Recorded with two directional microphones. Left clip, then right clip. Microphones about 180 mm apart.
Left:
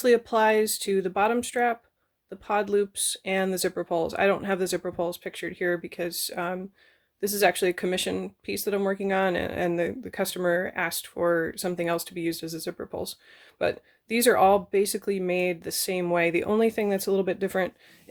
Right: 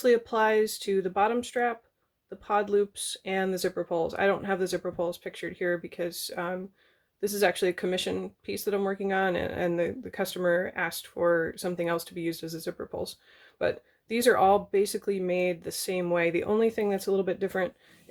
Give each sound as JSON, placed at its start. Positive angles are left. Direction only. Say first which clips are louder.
{"t": 0.0, "sound": "speech", "louder": "left 3 dB", "side_deg": 30}